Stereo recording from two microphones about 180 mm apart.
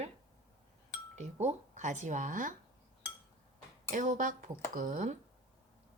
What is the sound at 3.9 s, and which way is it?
Speech, 45° right (ahead or behind).